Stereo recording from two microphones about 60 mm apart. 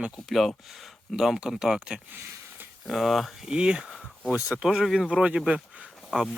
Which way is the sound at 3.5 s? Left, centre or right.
Centre.